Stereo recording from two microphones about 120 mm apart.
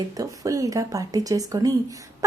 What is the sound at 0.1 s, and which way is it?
Speech, 30° right (ahead or behind).